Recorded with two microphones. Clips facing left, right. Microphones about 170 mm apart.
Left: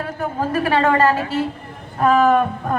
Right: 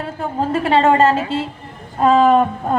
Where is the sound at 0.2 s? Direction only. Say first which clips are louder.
Right 2 dB; 25° right (ahead or behind).